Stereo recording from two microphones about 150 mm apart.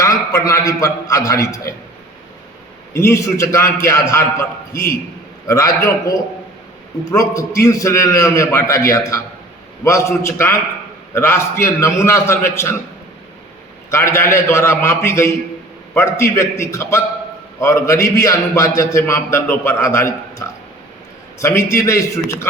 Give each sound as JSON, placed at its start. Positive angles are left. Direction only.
{"t": 0.0, "sound": "a man's voice", "side_deg": 20}
{"t": 2.9, "sound": "a man's voice", "side_deg": 20}
{"t": 13.9, "sound": "a man's voice", "side_deg": 15}